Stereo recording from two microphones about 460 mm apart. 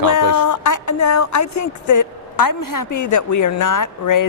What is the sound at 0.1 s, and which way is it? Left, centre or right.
A woman's voice, left.